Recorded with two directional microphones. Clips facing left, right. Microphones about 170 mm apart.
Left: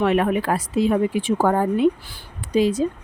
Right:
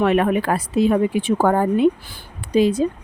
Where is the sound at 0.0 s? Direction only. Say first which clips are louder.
Right 2 dB; 60° right (ahead or behind).